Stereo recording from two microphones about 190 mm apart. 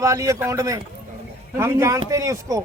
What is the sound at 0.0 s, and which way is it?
Speech, 15° right (ahead or behind).